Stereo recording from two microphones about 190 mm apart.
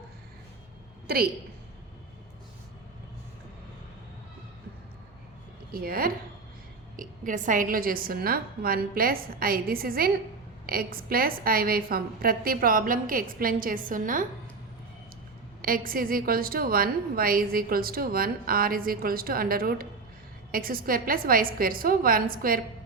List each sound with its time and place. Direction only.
1.0 s a woman's voice: 50° right (ahead or behind)
5.7 s a woman's voice: 50° right (ahead or behind)
15.6 s a woman's voice: 50° right (ahead or behind)